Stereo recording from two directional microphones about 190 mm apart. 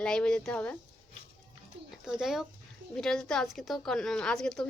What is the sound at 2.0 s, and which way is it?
A woman's voice, 5° right (ahead or behind).